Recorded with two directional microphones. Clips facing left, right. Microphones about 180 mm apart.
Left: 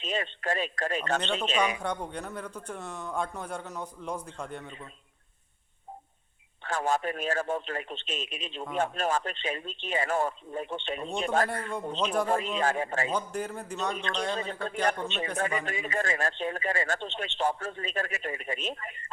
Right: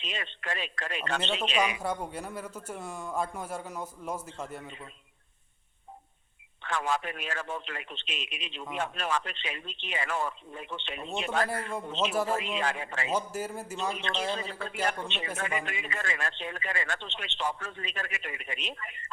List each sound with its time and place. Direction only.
0.0 s a man's voice: 45° left (ahead or behind)
1.8 s speech: 5° right (ahead or behind)
6.6 s speech: 45° left (ahead or behind)
12.0 s a man's voice: 5° right (ahead or behind)
12.3 s a man's voice: 40° left (ahead or behind)
13.1 s a man's voice: 5° right (ahead or behind)
14.8 s a man's voice: 40° left (ahead or behind)